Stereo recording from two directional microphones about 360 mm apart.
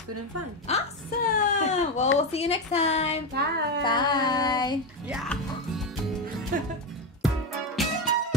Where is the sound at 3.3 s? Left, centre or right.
Right.